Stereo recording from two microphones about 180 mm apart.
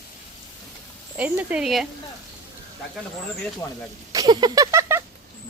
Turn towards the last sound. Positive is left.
turn(degrees=-15)  # may be behind; listen again after turning